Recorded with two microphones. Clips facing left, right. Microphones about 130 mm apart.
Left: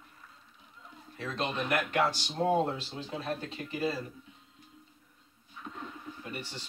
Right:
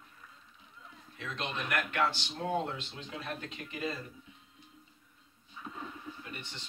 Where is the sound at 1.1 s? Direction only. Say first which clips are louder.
Left 5 dB; 35° left (ahead or behind).